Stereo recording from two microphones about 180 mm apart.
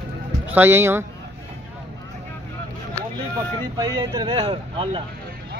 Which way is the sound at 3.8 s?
20° right (ahead or behind).